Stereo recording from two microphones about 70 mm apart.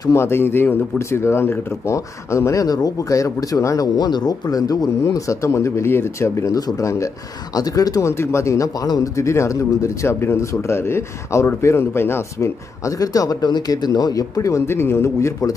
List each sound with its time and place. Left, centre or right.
0.1 s speech: left
2.6 s speech: left
5.0 s speech: left
7.5 s speech: left
8.0 s speech: left
8.8 s speech: left
9.1 s speech: left
12.8 s speech: left
14.7 s speech: left